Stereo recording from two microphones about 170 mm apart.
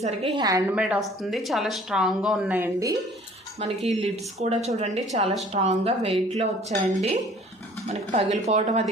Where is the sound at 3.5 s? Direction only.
35° right (ahead or behind).